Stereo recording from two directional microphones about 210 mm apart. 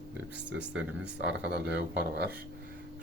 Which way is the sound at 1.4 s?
55° right (ahead or behind).